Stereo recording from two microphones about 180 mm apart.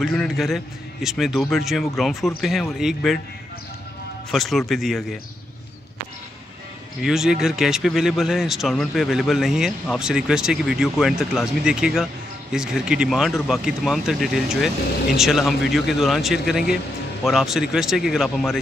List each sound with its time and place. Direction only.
0.0 s speech: centre (ahead or behind)
4.3 s speech: centre (ahead or behind)
7.0 s speech: 5° right (ahead or behind)